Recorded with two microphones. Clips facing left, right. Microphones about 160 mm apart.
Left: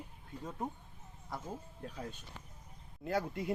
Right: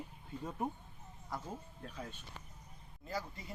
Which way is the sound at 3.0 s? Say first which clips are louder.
Left 7 dB; 60° left (ahead or behind).